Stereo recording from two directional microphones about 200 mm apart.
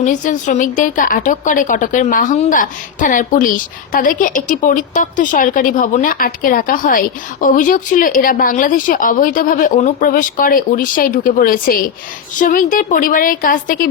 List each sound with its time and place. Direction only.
0.0 s a woman's voice: 40° left (ahead or behind)